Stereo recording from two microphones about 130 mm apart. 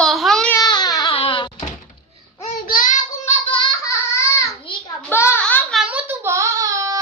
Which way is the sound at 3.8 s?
20° left (ahead or behind).